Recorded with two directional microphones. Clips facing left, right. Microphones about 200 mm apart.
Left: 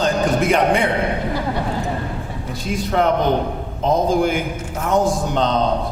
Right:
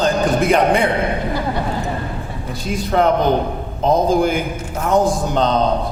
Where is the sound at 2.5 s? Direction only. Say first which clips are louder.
Right 2 dB; 35° right (ahead or behind).